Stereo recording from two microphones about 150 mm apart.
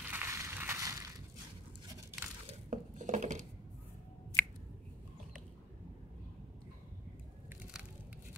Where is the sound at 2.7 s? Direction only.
55° right (ahead or behind).